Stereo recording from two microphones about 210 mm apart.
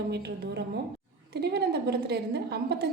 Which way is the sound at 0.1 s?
50° right (ahead or behind).